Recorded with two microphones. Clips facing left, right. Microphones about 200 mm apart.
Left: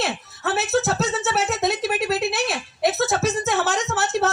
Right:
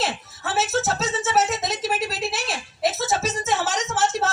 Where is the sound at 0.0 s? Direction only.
60° left (ahead or behind).